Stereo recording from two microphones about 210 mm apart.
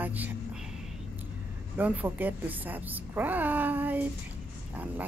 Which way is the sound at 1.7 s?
5° right (ahead or behind).